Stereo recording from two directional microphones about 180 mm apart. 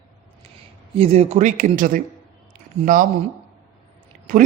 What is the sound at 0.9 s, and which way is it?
Speech, 30° right (ahead or behind).